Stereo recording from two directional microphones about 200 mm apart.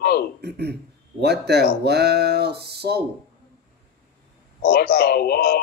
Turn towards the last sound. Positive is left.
turn(degrees=50)  # may be behind; listen again after turning